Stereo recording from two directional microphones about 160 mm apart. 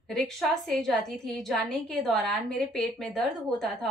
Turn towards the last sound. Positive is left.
turn(degrees=0)  # may be behind; listen again after turning